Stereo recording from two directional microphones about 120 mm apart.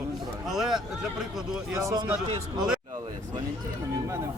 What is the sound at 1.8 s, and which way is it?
Speech, 25° right (ahead or behind).